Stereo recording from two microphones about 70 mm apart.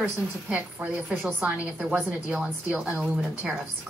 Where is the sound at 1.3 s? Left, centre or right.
Centre.